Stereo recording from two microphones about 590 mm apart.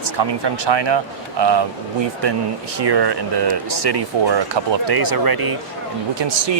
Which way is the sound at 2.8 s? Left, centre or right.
Right.